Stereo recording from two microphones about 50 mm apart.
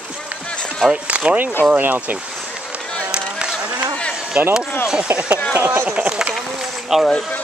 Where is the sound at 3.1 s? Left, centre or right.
Centre.